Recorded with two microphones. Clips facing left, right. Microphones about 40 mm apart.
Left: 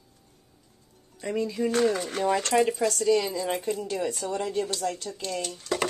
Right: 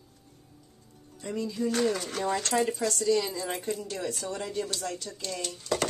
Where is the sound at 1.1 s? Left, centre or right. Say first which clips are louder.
Left 4 dB; left.